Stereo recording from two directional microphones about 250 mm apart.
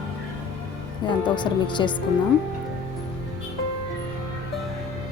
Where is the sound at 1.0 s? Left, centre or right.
Centre.